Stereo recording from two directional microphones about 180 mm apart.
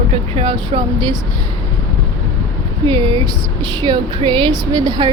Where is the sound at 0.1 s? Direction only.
30° right (ahead or behind).